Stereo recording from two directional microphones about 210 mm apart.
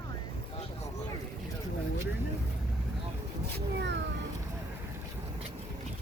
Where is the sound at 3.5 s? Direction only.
55° right (ahead or behind).